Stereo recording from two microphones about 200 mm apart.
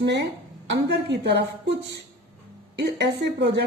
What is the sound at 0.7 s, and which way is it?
A woman's voice, 60° right (ahead or behind).